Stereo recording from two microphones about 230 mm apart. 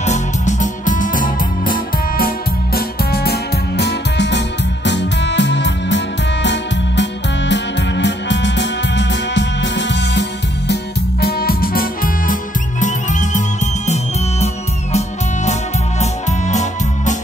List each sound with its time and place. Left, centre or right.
0.0 s music: left